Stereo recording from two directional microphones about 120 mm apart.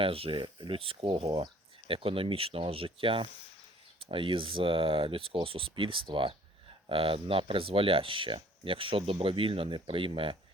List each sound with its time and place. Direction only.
0.0 s speech: 50° right (ahead or behind)